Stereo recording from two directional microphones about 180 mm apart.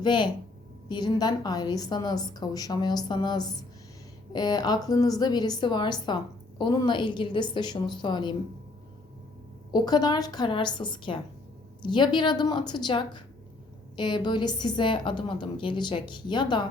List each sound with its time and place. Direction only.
0.0 s a woman's voice: 25° left (ahead or behind)
9.7 s a woman's voice: 20° left (ahead or behind)